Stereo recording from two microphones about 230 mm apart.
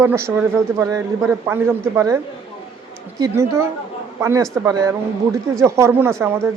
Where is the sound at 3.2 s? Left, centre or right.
Centre.